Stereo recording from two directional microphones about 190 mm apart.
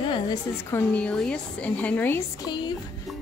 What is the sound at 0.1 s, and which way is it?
A woman's voice, 15° left (ahead or behind).